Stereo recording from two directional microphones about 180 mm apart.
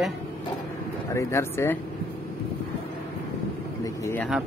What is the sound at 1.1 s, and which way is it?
Speech, 15° left (ahead or behind).